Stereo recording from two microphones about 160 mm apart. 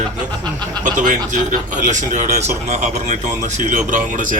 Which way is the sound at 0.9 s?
50° right (ahead or behind).